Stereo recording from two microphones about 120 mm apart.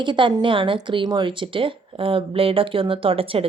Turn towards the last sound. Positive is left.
turn(degrees=-50)  # may be behind; listen again after turning